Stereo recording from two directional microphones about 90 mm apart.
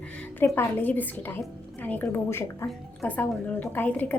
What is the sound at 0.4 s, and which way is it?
A woman's voice, 25° left (ahead or behind).